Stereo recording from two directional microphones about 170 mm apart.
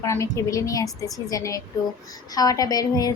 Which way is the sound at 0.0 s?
15° left (ahead or behind).